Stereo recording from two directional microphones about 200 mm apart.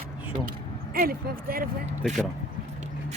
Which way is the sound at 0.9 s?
45° right (ahead or behind).